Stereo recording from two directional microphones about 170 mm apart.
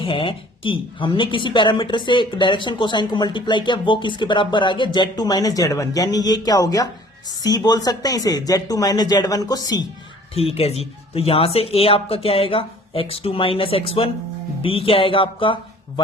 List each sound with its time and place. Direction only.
0.0 s a woman's voice: 30° left (ahead or behind)
10.3 s speech: 35° left (ahead or behind)